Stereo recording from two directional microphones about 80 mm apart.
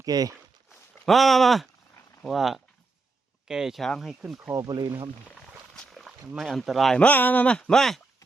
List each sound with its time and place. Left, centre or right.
0.0 s speech: right
1.0 s speech: centre
4.5 s speech: right
5.3 s a sound: centre
5.9 s speech: centre
7.0 s speech: left
7.5 s speech: centre